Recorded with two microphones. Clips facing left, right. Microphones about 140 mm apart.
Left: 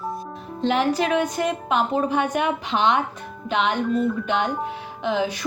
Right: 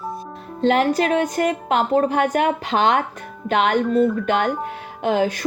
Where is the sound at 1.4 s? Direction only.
55° right (ahead or behind).